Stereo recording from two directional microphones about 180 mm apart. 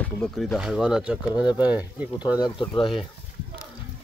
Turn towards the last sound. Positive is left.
turn(degrees=30)  # may be behind; listen again after turning